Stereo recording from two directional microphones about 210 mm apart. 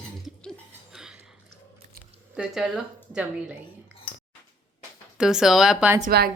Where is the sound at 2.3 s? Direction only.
5° right (ahead or behind).